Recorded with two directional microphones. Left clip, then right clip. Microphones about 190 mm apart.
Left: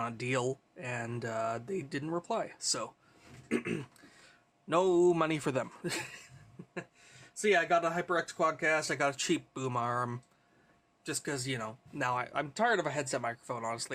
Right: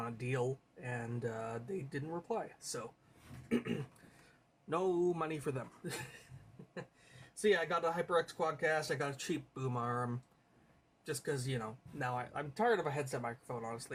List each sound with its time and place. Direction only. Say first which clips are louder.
0.0 s speech: left 5 dB; 50° left (ahead or behind)
4.7 s speech: left 8 dB; 50° left (ahead or behind)
7.4 s speech: left 5 dB; 60° left (ahead or behind)